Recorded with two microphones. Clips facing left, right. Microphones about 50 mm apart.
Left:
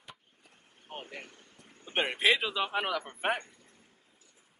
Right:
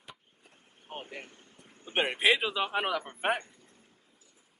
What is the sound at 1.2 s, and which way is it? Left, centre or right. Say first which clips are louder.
Boat: even; right.